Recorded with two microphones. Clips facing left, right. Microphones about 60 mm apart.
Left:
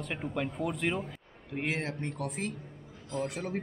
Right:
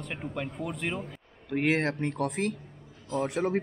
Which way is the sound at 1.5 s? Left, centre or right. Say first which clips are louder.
Right 7 dB; right.